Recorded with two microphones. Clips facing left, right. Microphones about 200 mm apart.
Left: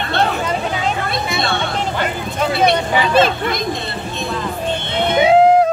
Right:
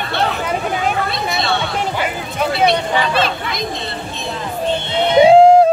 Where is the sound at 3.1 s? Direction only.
50° left (ahead or behind).